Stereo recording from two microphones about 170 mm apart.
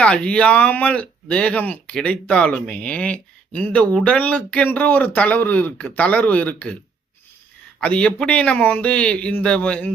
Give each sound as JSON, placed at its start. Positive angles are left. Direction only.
{"t": 0.0, "sound": "speech", "side_deg": 5}
{"t": 7.8, "sound": "speech", "side_deg": 5}